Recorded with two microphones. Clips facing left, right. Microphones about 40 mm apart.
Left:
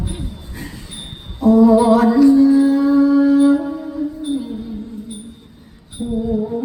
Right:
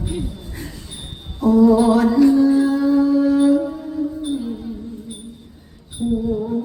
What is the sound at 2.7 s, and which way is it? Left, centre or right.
Music, left.